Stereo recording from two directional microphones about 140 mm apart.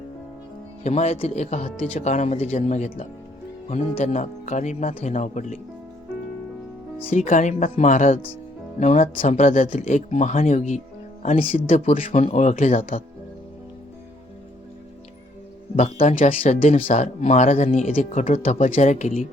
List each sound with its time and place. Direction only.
0.9 s speech: 50° left (ahead or behind)
7.3 s speech: 60° left (ahead or behind)
11.3 s speech: 45° left (ahead or behind)
11.9 s speech: 65° left (ahead or behind)
15.7 s speech: 60° left (ahead or behind)